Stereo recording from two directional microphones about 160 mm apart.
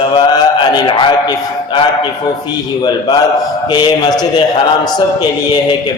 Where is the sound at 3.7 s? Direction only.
25° left (ahead or behind).